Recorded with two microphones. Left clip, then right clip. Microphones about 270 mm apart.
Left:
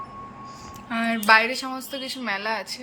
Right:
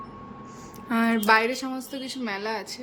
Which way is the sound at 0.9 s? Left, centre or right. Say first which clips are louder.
Left 2 dB; centre.